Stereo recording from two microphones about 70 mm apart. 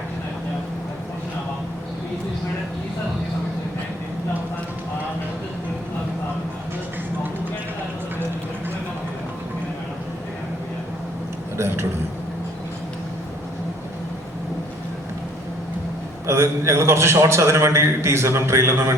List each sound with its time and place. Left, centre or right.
11.5 s speech: right
16.2 s a man's voice: right